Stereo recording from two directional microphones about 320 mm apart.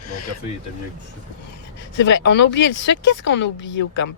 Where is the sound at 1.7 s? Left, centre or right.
Left.